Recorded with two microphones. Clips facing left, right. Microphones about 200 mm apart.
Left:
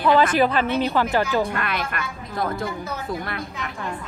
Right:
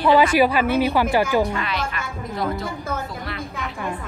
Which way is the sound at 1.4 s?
55° left (ahead or behind).